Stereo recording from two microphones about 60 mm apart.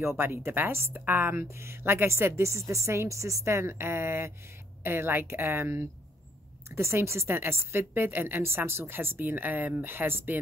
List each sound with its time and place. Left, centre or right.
0.2 s a woman's voice: right